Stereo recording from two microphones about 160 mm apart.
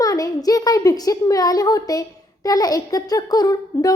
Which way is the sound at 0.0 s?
20° left (ahead or behind).